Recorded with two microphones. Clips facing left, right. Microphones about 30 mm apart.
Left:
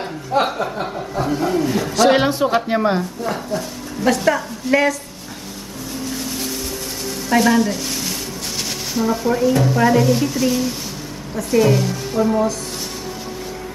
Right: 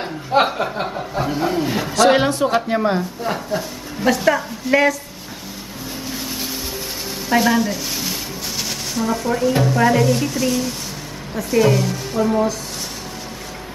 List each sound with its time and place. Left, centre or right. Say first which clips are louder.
0.3 s speech: right 2 dB; right
1.1 s a sound: left 1 dB; centre
2.0 s a woman's voice: even; centre
3.3 s a woman's voice: even; centre
6.0 s vehicle: left 2 dB; centre
7.2 s a woman's voice: left 1 dB; centre